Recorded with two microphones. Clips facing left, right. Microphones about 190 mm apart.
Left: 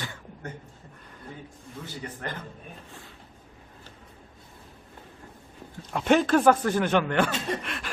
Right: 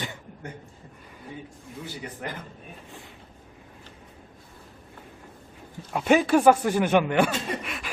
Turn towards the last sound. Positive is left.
turn(degrees=-5)  # may be behind; listen again after turning